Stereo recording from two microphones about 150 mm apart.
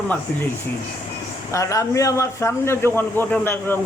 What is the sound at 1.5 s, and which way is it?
A man's voice, 20° left (ahead or behind).